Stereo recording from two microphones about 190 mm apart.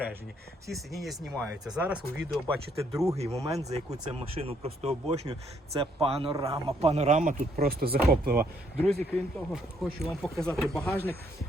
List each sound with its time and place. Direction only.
0.7 s speech: centre (ahead or behind)
2.5 s speech: 15° right (ahead or behind)
4.1 s speech: 30° right (ahead or behind); by 8.4 s 50° right (ahead or behind)
8.8 s speech: 10° left (ahead or behind)